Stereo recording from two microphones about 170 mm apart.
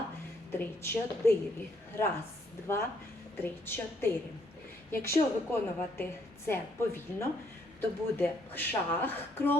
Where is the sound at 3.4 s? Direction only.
15° left (ahead or behind).